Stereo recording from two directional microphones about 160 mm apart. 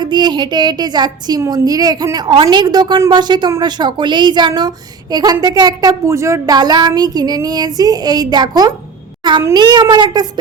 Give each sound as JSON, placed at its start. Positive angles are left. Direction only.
{"t": 0.0, "sound": "a woman's voice", "side_deg": -30}